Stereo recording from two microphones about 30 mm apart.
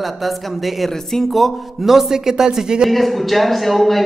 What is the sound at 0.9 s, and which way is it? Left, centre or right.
Speech, centre.